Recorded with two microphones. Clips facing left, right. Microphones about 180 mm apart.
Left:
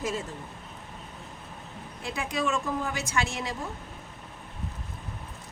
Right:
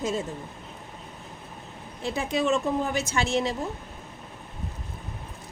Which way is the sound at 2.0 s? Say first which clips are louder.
Right 5 dB; 25° right (ahead or behind).